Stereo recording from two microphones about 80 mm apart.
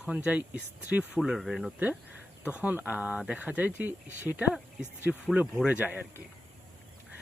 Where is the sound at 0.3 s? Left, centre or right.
Right.